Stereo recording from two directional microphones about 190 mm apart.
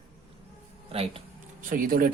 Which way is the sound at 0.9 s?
30° right (ahead or behind).